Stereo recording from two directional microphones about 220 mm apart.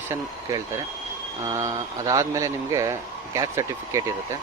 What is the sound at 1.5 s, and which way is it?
Speech, 15° right (ahead or behind).